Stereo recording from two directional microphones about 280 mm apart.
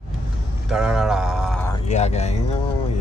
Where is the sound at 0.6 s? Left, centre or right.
Centre.